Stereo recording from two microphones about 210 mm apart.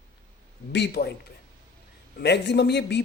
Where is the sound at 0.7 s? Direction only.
50° left (ahead or behind).